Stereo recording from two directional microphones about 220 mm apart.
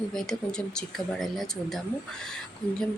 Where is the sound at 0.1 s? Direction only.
Centre (ahead or behind).